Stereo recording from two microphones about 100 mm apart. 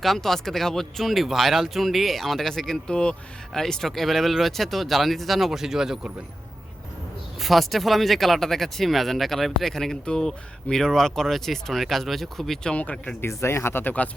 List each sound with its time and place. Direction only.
0.0 s speech: centre (ahead or behind)
7.3 s speech: centre (ahead or behind)
12.7 s speech: 15° left (ahead or behind)
13.2 s speech: 25° left (ahead or behind)